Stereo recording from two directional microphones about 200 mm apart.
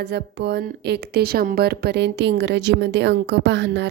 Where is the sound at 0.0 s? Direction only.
55° right (ahead or behind).